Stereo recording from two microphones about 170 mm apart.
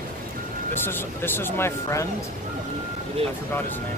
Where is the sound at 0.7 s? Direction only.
15° left (ahead or behind).